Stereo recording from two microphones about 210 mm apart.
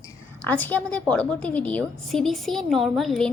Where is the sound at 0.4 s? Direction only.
10° left (ahead or behind).